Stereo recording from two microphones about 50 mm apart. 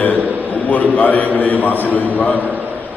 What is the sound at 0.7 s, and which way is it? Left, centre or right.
A man's voice, left.